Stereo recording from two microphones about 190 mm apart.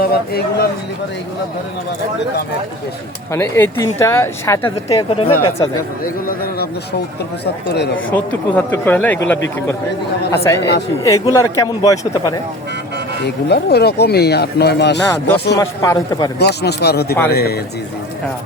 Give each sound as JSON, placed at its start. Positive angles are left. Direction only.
{"t": 0.0, "sound": "speech", "side_deg": 55}
{"t": 3.3, "sound": "a man's voice", "side_deg": 15}
{"t": 4.6, "sound": "speech", "side_deg": 25}
{"t": 6.2, "sound": "a man's voice", "side_deg": 50}
{"t": 8.1, "sound": "a man's voice", "side_deg": 10}
{"t": 10.3, "sound": "a man's voice", "side_deg": 15}
{"t": 13.2, "sound": "speech", "side_deg": 60}
{"t": 15.5, "sound": "a man's voice", "side_deg": 15}
{"t": 16.4, "sound": "speech", "side_deg": 60}